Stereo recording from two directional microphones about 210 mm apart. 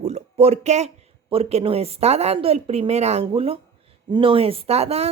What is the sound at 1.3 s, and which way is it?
A woman's voice, 30° right (ahead or behind).